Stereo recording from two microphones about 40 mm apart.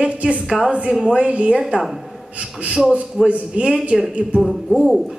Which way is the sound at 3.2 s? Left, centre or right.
Right.